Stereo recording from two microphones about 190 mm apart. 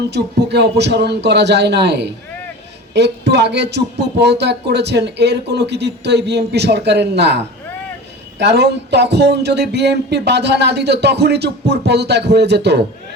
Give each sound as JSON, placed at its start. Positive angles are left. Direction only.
{"t": 0.1, "sound": "speech", "side_deg": -60}